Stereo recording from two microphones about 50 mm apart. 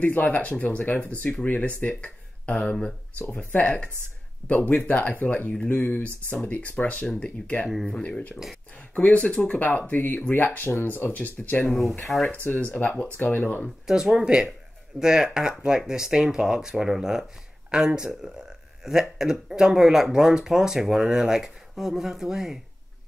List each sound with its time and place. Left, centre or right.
0.0 s speech: left
9.6 s speech: left
12.1 s speech: centre
12.6 s speech: left
13.8 s speech: centre